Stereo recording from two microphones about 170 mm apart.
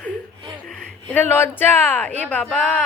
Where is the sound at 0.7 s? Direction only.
5° left (ahead or behind).